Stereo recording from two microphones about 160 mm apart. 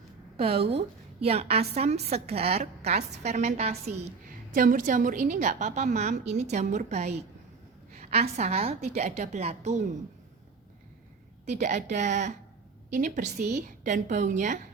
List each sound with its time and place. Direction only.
0.3 s a woman's voice: 35° right (ahead or behind)
4.5 s a woman's voice: 60° right (ahead or behind); by 9.8 s 45° right (ahead or behind)
11.4 s a woman's voice: 50° right (ahead or behind)